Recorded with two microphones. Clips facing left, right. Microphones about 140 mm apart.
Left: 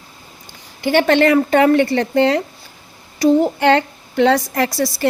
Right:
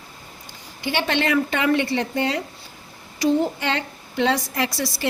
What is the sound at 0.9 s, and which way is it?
Speech, 50° left (ahead or behind).